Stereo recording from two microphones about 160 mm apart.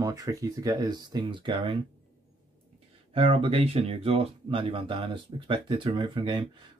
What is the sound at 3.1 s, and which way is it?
Speech, 35° right (ahead or behind).